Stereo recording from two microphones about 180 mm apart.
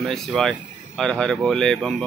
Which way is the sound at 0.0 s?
Centre (ahead or behind).